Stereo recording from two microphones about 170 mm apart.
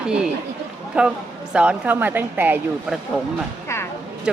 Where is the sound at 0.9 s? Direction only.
5° right (ahead or behind).